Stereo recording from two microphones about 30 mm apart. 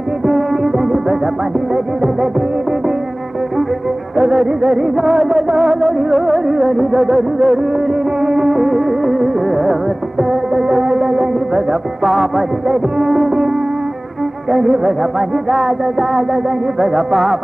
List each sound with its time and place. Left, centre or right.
0.3 s music: centre
4.2 s music: centre
12.0 s music: centre
14.5 s music: centre